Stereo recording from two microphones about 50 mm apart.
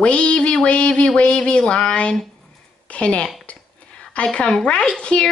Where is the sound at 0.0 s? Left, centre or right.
Left.